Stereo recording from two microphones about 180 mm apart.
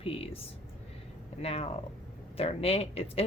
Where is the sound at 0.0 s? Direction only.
35° left (ahead or behind).